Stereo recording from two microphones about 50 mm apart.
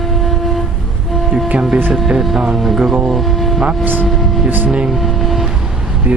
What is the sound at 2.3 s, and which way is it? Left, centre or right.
Speech, centre.